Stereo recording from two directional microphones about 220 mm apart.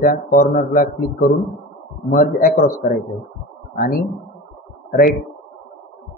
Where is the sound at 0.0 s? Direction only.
40° left (ahead or behind).